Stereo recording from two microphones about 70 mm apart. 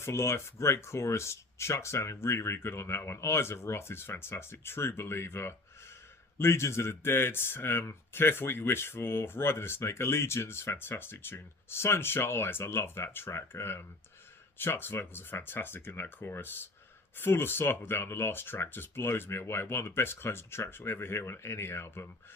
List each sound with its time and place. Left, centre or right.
0.0 s speech: left